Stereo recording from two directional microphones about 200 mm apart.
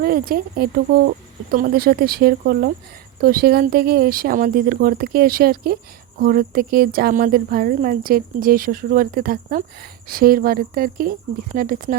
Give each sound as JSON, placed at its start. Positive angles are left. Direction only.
{"t": 0.0, "sound": "speech", "side_deg": -45}